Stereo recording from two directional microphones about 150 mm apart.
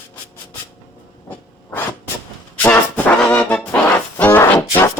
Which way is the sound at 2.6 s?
10° left (ahead or behind).